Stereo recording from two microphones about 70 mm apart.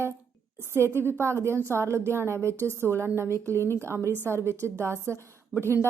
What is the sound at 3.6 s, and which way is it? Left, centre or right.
Speech, left.